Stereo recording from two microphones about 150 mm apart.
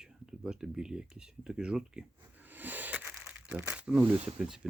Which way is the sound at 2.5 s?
10° right (ahead or behind).